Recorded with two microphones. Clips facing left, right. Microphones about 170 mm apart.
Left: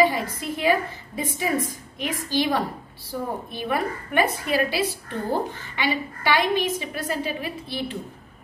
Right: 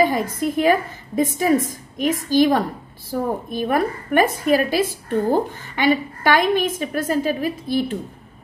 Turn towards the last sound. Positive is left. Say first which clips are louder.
# right 8 dB
turn(degrees=-45)  # may be behind; listen again after turning